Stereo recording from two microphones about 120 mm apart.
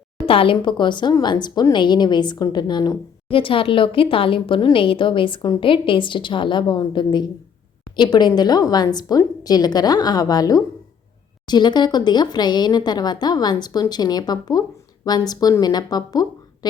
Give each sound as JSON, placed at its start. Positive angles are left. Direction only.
{"t": 0.3, "sound": "speech", "side_deg": 50}
{"t": 3.2, "sound": "speech", "side_deg": 45}